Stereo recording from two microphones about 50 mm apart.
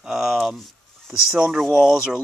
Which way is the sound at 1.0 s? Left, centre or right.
Centre.